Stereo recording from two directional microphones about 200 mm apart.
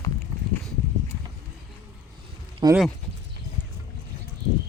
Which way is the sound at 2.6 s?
20° right (ahead or behind).